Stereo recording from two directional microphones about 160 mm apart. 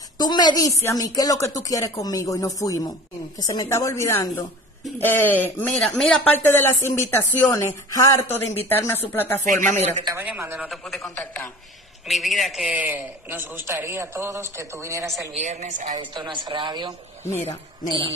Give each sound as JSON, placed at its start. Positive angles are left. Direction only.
{"t": 0.2, "sound": "speech", "side_deg": 25}
{"t": 9.5, "sound": "a woman's voice", "side_deg": -50}
{"t": 10.2, "sound": "a man's voice", "side_deg": -10}
{"t": 10.7, "sound": "a man's voice", "side_deg": 0}
{"t": 15.3, "sound": "a woman's voice", "side_deg": -45}
{"t": 16.0, "sound": "speech", "side_deg": -30}